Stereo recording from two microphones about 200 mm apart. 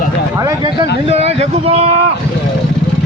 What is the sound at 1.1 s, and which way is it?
Speech, 30° right (ahead or behind).